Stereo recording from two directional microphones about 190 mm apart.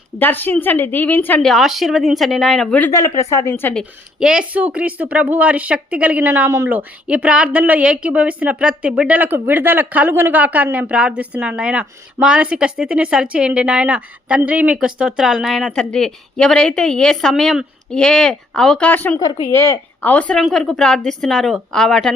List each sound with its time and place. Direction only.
0.2 s a woman's voice: 10° left (ahead or behind)
4.2 s a woman's voice: 5° right (ahead or behind)
19.2 s a woman's voice: 25° left (ahead or behind)
19.5 s speech: 15° left (ahead or behind)